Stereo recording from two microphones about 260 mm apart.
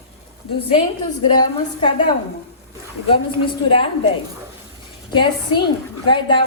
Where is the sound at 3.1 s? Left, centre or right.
Centre.